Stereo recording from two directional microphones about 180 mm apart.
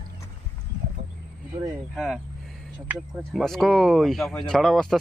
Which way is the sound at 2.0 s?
Centre (ahead or behind).